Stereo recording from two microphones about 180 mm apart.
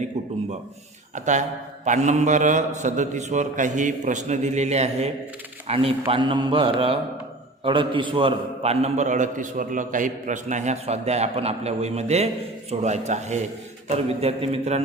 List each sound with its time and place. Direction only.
1.1 s a man's voice: 40° right (ahead or behind)